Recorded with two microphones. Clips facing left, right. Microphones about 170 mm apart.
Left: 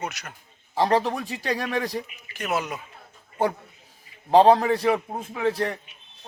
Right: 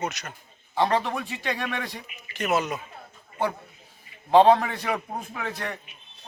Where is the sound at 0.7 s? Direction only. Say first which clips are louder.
Left 2 dB; 35° left (ahead or behind).